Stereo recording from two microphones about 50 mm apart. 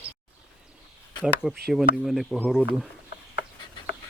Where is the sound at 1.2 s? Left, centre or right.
Centre.